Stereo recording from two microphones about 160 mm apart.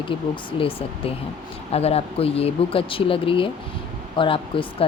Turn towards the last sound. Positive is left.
turn(degrees=35)  # may be behind; listen again after turning